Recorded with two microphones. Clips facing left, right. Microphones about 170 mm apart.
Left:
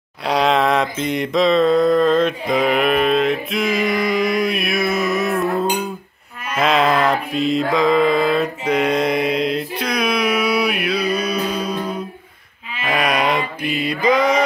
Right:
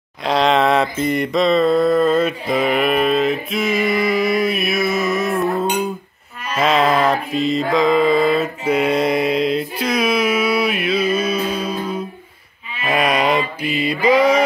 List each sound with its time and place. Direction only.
0.2 s mantra: 5° left (ahead or behind)
12.8 s a sound: centre (ahead or behind)
13.6 s mantra: 50° left (ahead or behind)
13.8 s mantra: 5° right (ahead or behind)